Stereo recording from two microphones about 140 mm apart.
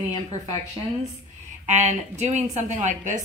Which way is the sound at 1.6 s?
55° right (ahead or behind).